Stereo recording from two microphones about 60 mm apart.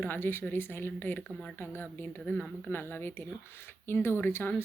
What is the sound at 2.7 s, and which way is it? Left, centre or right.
Speech, left.